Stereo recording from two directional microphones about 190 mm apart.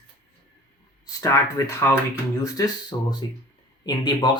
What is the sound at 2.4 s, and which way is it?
Speech, 20° left (ahead or behind).